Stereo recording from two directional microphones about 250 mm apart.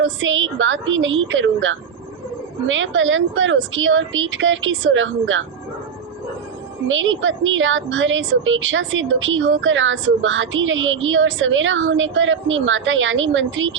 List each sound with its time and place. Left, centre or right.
0.0 s a woman's voice: right
6.8 s a woman's voice: right